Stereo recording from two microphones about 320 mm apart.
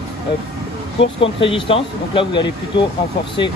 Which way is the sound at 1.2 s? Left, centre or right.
Centre.